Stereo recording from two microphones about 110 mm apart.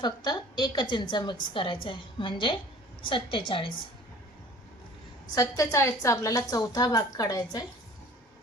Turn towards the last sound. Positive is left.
turn(degrees=35)  # may be behind; listen again after turning